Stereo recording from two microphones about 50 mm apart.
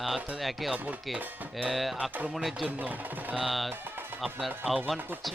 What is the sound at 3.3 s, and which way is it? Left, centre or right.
Speech, centre.